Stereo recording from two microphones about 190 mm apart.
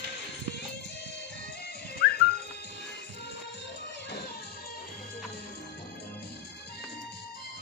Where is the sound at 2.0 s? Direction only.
60° left (ahead or behind).